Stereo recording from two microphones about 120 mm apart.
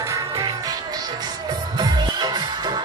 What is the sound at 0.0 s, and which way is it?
Music, 30° right (ahead or behind).